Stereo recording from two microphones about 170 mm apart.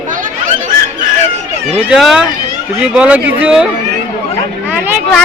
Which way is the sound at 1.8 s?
5° right (ahead or behind).